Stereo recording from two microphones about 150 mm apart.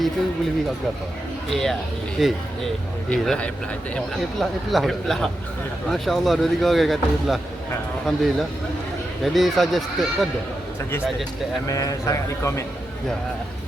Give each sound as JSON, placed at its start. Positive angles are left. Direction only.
{"t": 1.5, "sound": "speech", "side_deg": 0}
{"t": 11.7, "sound": "speech", "side_deg": 20}